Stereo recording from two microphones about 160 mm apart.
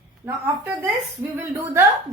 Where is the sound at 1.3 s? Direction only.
15° right (ahead or behind).